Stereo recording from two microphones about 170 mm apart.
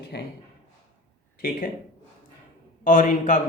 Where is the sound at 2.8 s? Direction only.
50° left (ahead or behind).